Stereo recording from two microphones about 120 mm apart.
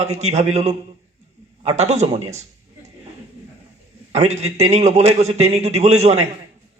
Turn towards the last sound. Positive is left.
turn(degrees=-65)  # may be behind; listen again after turning